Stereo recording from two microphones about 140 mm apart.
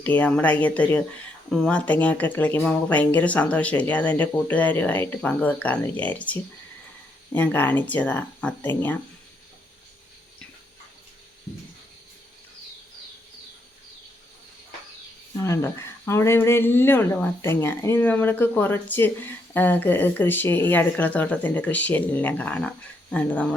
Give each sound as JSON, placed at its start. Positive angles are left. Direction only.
{"t": 0.0, "sound": "speech", "side_deg": 10}
{"t": 16.0, "sound": "speech", "side_deg": 20}